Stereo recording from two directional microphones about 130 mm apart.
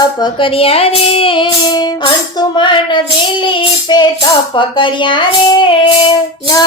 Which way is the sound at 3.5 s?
35° left (ahead or behind).